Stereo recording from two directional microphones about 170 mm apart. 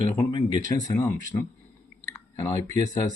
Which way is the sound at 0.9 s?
15° left (ahead or behind).